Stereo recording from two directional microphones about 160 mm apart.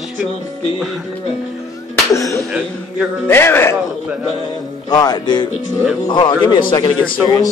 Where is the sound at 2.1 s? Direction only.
20° left (ahead or behind).